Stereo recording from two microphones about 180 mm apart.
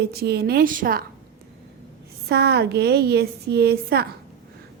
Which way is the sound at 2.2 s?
65° right (ahead or behind).